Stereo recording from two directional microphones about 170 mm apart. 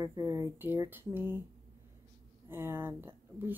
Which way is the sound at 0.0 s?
15° right (ahead or behind).